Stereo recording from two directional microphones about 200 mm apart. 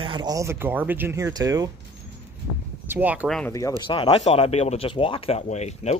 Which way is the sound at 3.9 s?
25° left (ahead or behind).